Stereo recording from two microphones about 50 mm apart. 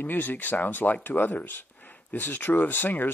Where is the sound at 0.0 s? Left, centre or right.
Left.